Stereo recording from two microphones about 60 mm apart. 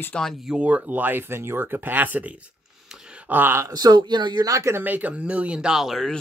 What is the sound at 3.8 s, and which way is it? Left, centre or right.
Speech, right.